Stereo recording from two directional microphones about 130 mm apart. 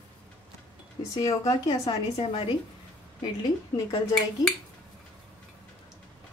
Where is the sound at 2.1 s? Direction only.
45° left (ahead or behind).